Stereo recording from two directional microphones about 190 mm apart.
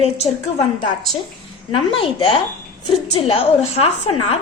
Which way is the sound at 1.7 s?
25° left (ahead or behind).